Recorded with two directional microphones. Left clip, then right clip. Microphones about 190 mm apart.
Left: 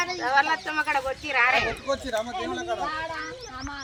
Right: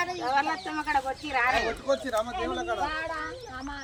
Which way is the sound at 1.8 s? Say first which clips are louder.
Even; 25° left (ahead or behind).